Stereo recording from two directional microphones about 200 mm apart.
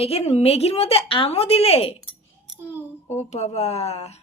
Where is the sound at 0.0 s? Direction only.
30° left (ahead or behind).